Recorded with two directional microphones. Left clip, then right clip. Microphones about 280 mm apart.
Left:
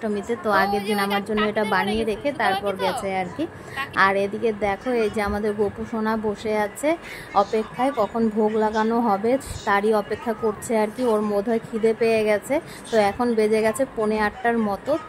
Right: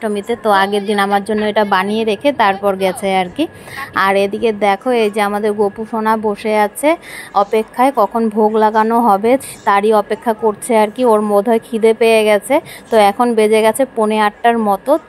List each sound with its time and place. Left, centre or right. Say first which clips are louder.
0.0 s a woman's voice: right 8 dB; centre
1.1 s a woman's voice: right 8 dB; centre
1.5 s a woman's voice: right 11 dB; centre